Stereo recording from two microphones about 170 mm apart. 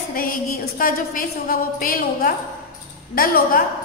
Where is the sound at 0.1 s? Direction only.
55° left (ahead or behind).